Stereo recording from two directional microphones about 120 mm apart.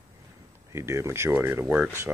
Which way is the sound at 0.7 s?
25° right (ahead or behind).